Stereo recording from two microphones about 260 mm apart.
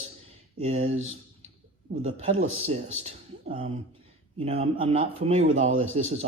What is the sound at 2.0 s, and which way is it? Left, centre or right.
Speech, right.